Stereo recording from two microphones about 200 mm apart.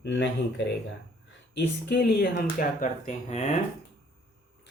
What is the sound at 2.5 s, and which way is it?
Speech, 40° left (ahead or behind).